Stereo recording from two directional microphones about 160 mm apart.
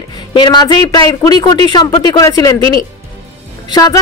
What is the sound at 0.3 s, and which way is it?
Speech, 30° left (ahead or behind).